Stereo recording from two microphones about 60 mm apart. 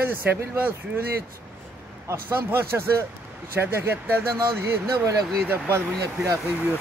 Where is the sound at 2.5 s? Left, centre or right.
Right.